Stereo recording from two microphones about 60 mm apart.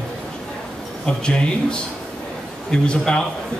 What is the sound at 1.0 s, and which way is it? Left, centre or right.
A man's voice, centre.